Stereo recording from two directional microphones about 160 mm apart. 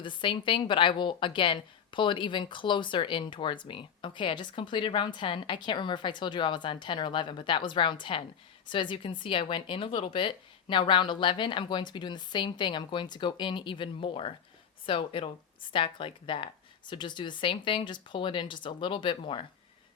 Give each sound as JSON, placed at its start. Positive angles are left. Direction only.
{"t": 0.0, "sound": "a woman's voice", "side_deg": 30}